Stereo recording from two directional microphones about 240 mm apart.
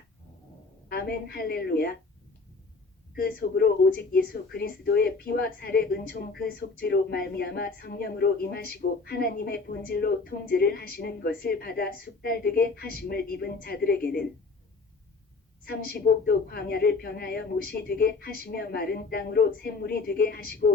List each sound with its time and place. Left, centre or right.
0.9 s speech: left
3.2 s speech: left
15.6 s speech: left